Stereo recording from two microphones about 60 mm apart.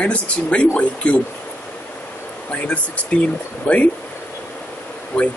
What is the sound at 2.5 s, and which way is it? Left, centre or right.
Speech, centre.